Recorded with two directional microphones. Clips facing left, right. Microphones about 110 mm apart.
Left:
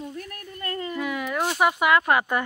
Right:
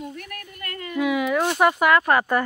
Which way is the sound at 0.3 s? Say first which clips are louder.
Left 3 dB; 30° left (ahead or behind).